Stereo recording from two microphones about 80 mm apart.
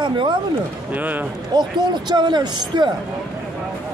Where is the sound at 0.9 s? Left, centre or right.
Right.